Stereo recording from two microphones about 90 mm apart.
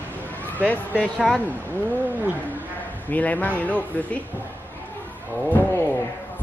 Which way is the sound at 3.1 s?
15° left (ahead or behind).